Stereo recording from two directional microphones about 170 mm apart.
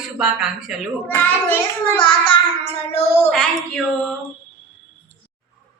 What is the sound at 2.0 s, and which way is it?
Child singing, 30° left (ahead or behind).